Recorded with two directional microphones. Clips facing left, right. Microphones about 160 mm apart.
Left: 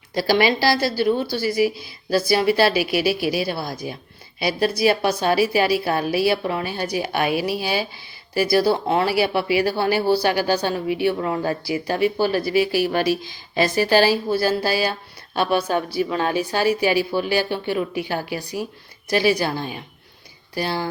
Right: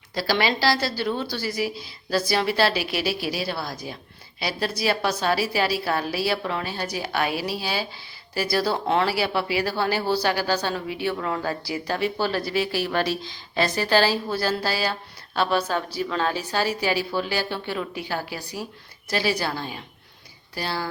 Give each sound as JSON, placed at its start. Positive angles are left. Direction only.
{"t": 0.1, "sound": "speech", "side_deg": 15}